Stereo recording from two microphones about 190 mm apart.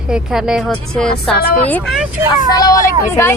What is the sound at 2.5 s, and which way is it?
Speech, 20° left (ahead or behind).